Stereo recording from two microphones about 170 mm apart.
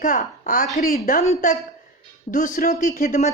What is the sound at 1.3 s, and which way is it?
A woman's voice, 45° left (ahead or behind).